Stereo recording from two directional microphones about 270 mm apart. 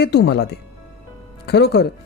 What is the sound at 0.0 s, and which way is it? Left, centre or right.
Speech, left.